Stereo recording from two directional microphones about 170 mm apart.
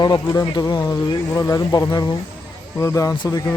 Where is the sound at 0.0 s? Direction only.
25° left (ahead or behind).